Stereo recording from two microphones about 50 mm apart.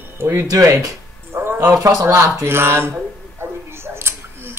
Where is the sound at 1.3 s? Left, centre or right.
Right.